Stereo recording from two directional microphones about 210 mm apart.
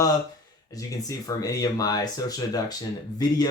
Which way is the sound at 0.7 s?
15° left (ahead or behind).